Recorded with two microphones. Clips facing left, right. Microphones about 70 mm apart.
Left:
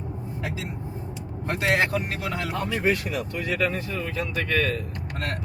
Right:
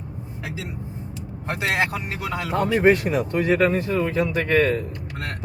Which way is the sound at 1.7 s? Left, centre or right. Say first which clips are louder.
Left 2 dB; centre.